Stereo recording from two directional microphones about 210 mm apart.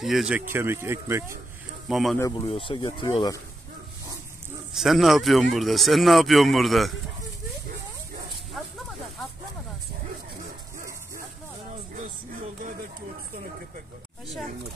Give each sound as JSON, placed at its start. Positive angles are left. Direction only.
{"t": 0.0, "sound": "speech", "side_deg": 0}
{"t": 1.9, "sound": "speech", "side_deg": 0}
{"t": 2.1, "sound": "speech", "side_deg": 15}
{"t": 4.7, "sound": "speech", "side_deg": 0}